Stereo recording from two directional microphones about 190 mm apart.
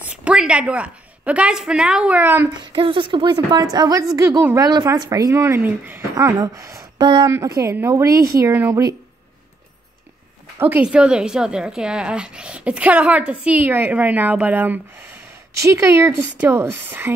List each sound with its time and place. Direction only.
0.0 s a woman's voice: 5° right (ahead or behind)
2.7 s a woman's voice: 25° right (ahead or behind)
10.6 s speech: 10° right (ahead or behind)